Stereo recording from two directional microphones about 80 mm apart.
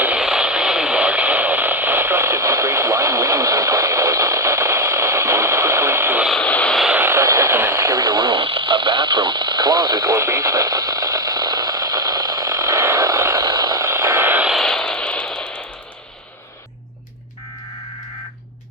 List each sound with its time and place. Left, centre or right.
0.0 s radio: centre; by 6.1 s right
6.4 s vehicle: centre
7.0 s radio: right
7.9 s radio: right
13.5 s vehicle: right
13.7 s a sound: right
14.6 s a sound: centre